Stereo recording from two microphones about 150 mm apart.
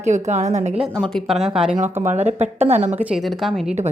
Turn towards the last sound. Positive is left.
turn(degrees=0)  # may be behind; listen again after turning